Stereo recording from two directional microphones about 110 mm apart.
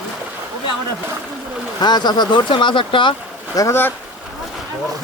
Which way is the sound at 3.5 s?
30° left (ahead or behind).